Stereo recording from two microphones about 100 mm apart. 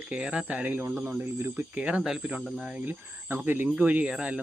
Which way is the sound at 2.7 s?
20° right (ahead or behind).